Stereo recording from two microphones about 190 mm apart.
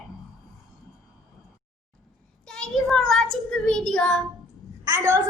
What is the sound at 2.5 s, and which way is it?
A child's voice, 5° left (ahead or behind).